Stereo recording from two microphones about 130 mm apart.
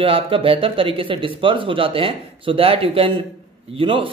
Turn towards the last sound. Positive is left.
turn(degrees=-40)  # may be behind; listen again after turning